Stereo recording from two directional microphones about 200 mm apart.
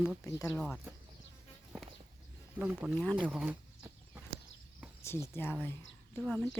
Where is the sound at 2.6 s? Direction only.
10° right (ahead or behind).